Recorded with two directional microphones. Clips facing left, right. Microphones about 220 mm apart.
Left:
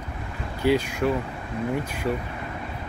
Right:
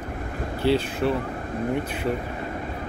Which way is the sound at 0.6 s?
15° left (ahead or behind).